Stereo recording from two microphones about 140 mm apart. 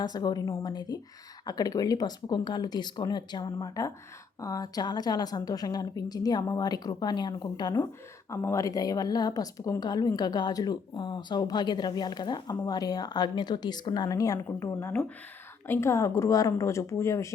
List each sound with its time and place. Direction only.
0.0 s a woman's voice: 30° left (ahead or behind)